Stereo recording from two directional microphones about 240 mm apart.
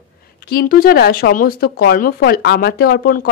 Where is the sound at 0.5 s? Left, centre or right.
Left.